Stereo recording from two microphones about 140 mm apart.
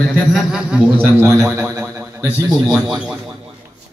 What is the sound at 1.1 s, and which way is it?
A man's voice, 20° right (ahead or behind).